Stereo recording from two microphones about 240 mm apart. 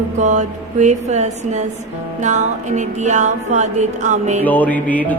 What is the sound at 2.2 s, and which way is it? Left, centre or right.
Speech, right.